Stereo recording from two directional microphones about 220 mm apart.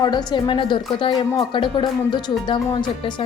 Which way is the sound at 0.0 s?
20° left (ahead or behind).